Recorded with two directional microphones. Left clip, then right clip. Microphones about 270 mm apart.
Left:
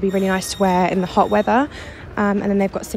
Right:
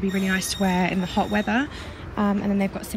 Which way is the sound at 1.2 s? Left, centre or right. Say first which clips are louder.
Left 9 dB; right.